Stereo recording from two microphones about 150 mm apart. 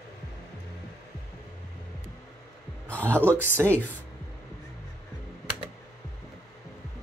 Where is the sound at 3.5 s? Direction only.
15° right (ahead or behind).